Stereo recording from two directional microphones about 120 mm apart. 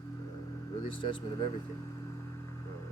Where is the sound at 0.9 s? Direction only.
45° left (ahead or behind).